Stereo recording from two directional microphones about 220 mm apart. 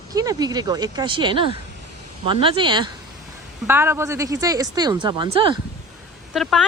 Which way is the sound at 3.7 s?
10° right (ahead or behind).